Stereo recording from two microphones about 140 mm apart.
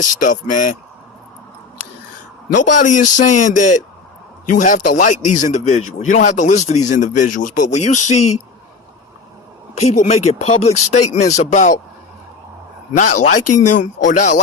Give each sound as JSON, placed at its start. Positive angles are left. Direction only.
{"t": 0.0, "sound": "speech", "side_deg": 70}
{"t": 2.6, "sound": "a man's voice", "side_deg": 65}
{"t": 9.8, "sound": "a man's voice", "side_deg": 60}
{"t": 13.0, "sound": "a man's voice", "side_deg": 65}